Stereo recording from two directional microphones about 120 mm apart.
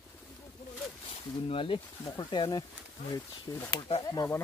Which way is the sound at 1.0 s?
50° left (ahead or behind).